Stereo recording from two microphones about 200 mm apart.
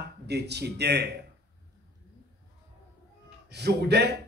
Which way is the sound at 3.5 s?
55° right (ahead or behind).